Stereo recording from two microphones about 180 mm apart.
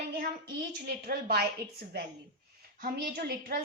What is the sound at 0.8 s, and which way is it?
Speech, 60° right (ahead or behind).